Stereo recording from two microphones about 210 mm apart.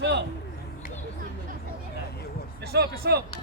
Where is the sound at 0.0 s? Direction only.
55° right (ahead or behind).